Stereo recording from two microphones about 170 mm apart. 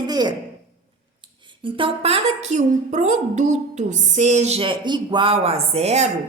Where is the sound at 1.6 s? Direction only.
30° right (ahead or behind).